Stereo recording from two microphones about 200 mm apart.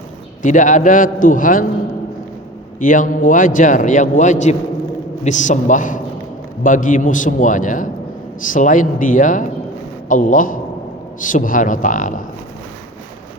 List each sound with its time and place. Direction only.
0.4 s a man's voice: 40° left (ahead or behind)
2.8 s a man's voice: 40° left (ahead or behind)